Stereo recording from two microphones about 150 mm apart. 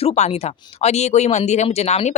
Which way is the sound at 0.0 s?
45° left (ahead or behind).